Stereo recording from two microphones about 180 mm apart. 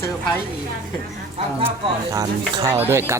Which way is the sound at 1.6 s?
20° right (ahead or behind).